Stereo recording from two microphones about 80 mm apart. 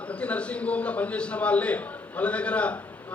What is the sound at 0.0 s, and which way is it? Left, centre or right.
A man's voice, centre.